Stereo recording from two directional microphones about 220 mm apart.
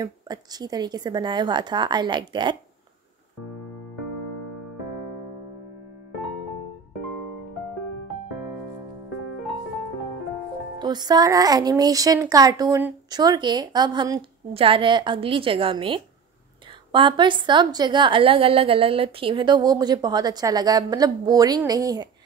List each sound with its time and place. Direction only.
0.0 s speech: 15° right (ahead or behind)
10.8 s speech: 20° right (ahead or behind)